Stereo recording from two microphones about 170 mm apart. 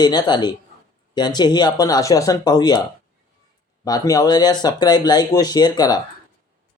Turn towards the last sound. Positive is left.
turn(degrees=25)  # may be behind; listen again after turning